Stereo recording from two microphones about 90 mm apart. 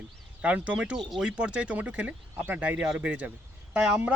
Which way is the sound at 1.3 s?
10° right (ahead or behind).